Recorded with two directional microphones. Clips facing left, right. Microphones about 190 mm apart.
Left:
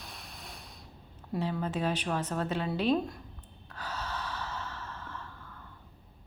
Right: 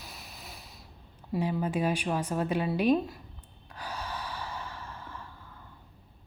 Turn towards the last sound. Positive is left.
turn(degrees=-10)  # may be behind; listen again after turning